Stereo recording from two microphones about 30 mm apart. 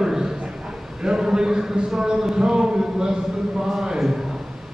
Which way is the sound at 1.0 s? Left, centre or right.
Right.